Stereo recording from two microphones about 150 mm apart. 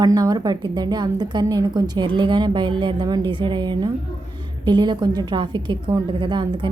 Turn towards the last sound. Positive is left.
turn(degrees=-30)  # may be behind; listen again after turning